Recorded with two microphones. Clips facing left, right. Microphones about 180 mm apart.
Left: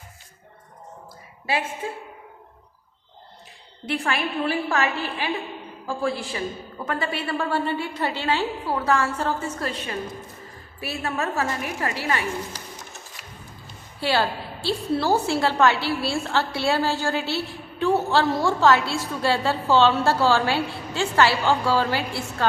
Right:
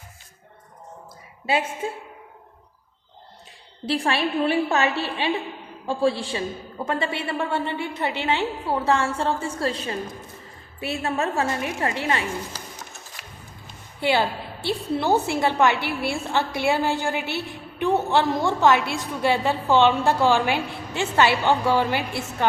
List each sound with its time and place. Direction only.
1.8 s a woman's voice: 25° right (ahead or behind)
3.8 s a woman's voice: 30° right (ahead or behind)
14.0 s a woman's voice: 20° right (ahead or behind)